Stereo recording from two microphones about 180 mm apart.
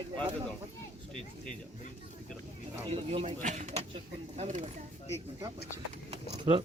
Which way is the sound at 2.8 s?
35° right (ahead or behind).